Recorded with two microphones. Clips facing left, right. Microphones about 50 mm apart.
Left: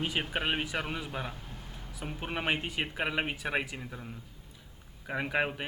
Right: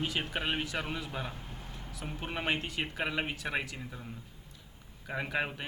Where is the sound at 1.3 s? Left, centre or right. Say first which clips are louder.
Even; right.